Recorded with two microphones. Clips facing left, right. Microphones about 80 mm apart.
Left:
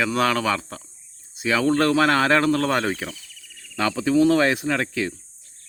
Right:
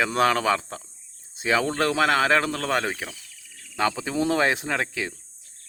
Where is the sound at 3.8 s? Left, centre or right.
Centre.